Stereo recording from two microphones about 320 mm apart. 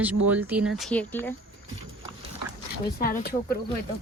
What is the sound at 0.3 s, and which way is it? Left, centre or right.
Speech, centre.